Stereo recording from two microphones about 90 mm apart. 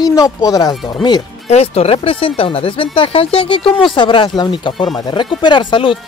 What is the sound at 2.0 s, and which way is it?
Speech, 90° left.